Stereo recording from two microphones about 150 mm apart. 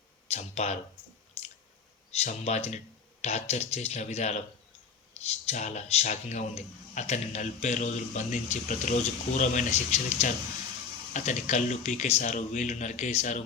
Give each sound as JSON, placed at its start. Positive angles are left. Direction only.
{"t": 0.3, "sound": "speech", "side_deg": 45}
{"t": 1.4, "sound": "drip", "side_deg": 45}
{"t": 2.0, "sound": "speech", "side_deg": 45}